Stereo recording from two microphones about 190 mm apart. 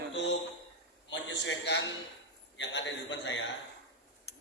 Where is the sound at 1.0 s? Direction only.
70° left (ahead or behind).